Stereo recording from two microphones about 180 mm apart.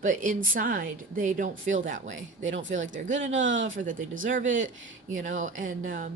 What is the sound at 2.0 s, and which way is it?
Speech, 90° right.